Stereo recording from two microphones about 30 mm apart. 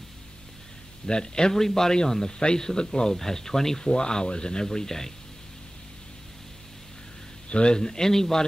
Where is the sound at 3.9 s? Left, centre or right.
Left.